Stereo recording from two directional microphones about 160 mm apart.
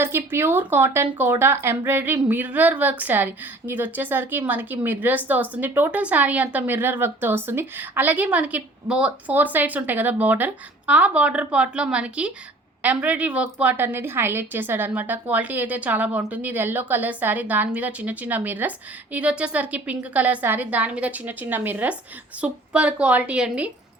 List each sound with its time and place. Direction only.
0.0 s speech: 15° right (ahead or behind)